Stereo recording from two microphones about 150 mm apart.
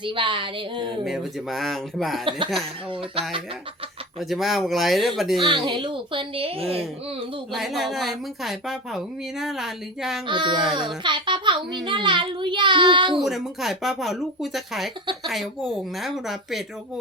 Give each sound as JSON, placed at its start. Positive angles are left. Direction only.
{"t": 0.0, "sound": "a child's voice", "side_deg": -35}
{"t": 1.0, "sound": "speech", "side_deg": 0}
{"t": 4.2, "sound": "speech", "side_deg": 0}
{"t": 5.4, "sound": "a child's voice", "side_deg": -35}
{"t": 7.5, "sound": "speech", "side_deg": 0}
{"t": 10.2, "sound": "a child's voice", "side_deg": -30}
{"t": 13.1, "sound": "speech", "side_deg": 0}